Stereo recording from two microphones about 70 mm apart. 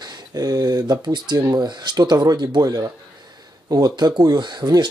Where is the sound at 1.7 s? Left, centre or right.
Right.